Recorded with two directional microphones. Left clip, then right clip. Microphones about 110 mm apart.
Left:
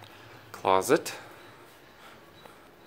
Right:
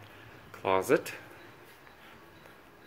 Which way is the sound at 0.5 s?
25° left (ahead or behind).